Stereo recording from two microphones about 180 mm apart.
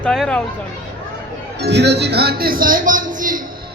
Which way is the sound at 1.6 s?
70° right (ahead or behind).